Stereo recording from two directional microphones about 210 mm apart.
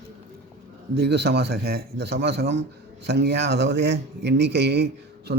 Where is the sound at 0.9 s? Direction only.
50° right (ahead or behind).